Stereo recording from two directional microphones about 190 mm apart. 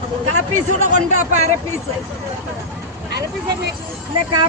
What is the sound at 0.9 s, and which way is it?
Speech, 40° right (ahead or behind).